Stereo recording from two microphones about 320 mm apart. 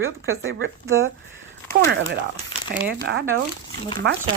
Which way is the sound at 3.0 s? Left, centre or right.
Right.